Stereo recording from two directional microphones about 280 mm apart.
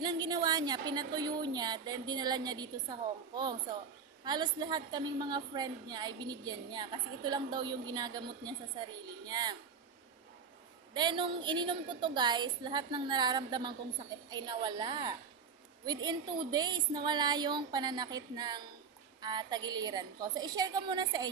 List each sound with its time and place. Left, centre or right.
0.0 s a woman's voice: centre
10.9 s a woman's voice: centre